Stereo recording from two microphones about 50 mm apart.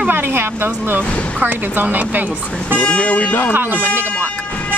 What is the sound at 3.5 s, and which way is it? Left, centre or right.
Speech, right.